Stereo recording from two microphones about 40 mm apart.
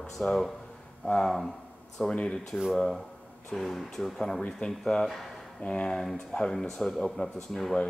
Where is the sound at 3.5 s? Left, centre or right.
Centre.